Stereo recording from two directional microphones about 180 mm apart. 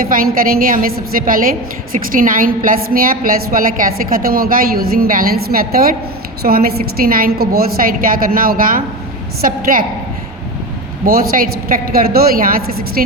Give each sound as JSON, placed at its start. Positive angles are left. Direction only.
{"t": 0.1, "sound": "a woman's voice", "side_deg": -50}
{"t": 11.0, "sound": "a woman's voice", "side_deg": -55}